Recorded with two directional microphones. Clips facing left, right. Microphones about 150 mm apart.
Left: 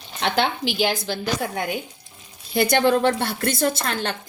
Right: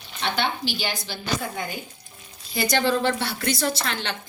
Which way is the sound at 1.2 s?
70° left (ahead or behind).